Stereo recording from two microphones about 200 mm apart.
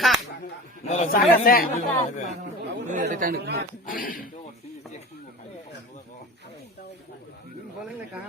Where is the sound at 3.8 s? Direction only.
45° left (ahead or behind).